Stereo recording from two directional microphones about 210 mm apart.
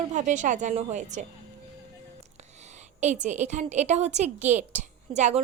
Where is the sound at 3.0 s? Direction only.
35° right (ahead or behind).